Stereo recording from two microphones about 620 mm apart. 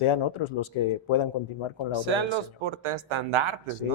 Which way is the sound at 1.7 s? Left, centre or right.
Right.